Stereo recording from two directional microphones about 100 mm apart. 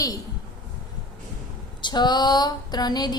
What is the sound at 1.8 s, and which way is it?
A woman's voice, 45° left (ahead or behind).